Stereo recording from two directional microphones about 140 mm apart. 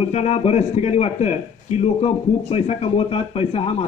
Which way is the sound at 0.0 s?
50° left (ahead or behind).